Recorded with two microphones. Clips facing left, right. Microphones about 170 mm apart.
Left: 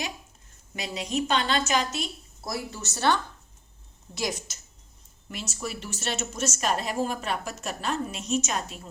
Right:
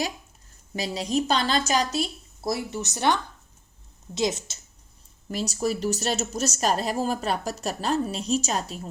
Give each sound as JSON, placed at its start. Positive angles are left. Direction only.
{"t": 0.7, "sound": "a woman's voice", "side_deg": -35}
{"t": 5.3, "sound": "speech", "side_deg": -35}